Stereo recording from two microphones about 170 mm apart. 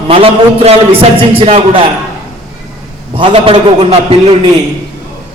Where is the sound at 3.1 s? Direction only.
30° right (ahead or behind).